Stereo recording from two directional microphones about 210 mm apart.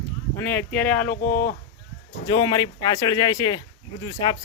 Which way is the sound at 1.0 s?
40° left (ahead or behind).